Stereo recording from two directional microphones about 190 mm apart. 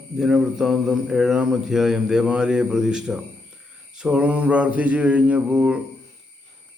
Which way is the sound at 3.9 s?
5° right (ahead or behind).